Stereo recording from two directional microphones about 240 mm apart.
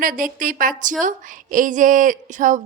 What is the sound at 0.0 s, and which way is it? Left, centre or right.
A woman's voice, right.